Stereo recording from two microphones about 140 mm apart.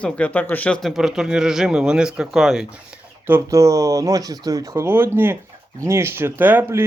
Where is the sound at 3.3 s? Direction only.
20° right (ahead or behind).